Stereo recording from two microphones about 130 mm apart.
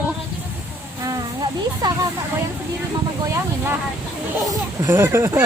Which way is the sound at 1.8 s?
30° right (ahead or behind).